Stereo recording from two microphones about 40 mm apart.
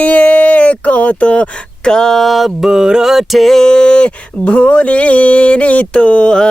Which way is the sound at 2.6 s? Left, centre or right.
Centre.